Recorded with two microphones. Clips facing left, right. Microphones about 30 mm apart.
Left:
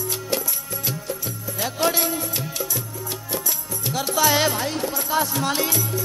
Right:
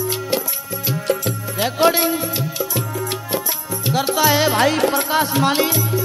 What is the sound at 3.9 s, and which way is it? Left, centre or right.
Music, right.